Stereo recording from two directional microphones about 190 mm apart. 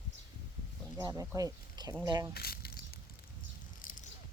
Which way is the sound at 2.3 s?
55° left (ahead or behind).